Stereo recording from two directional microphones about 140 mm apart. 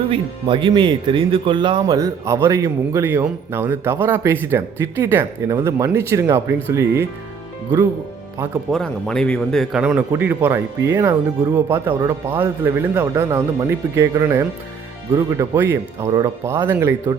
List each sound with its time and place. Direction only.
0.1 s speech: 35° right (ahead or behind)
2.0 s a man's voice: 20° right (ahead or behind)
8.7 s speech: 5° left (ahead or behind)
9.8 s a man's voice: 15° right (ahead or behind)